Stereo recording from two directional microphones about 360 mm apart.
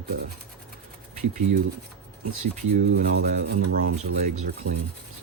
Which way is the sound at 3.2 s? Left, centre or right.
Right.